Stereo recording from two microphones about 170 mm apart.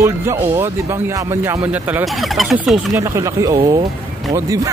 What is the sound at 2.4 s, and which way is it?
Speech, centre (ahead or behind).